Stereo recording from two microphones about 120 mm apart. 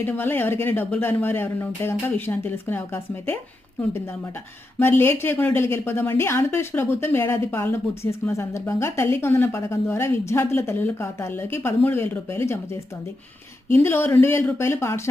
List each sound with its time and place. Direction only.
0.0 s a woman's voice: 15° left (ahead or behind)
13.7 s a woman's voice: 20° left (ahead or behind)